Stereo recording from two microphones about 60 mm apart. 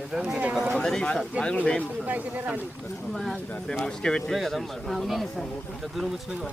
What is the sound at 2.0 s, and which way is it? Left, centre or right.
Speech, right.